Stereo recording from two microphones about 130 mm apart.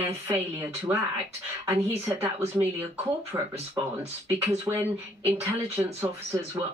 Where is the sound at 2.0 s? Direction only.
20° right (ahead or behind).